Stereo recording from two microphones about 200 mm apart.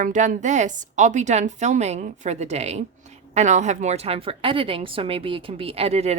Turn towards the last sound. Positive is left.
turn(degrees=-30)  # may be behind; listen again after turning